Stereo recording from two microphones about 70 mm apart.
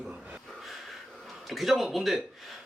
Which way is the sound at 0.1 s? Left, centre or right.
Centre.